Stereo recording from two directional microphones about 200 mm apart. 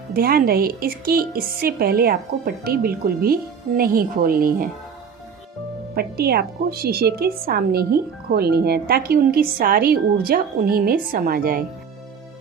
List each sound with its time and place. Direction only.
0.1 s a woman's voice: 50° right (ahead or behind)
5.9 s a woman's voice: 50° right (ahead or behind)